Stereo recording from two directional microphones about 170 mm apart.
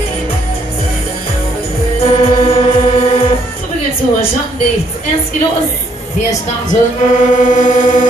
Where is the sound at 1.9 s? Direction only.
35° left (ahead or behind).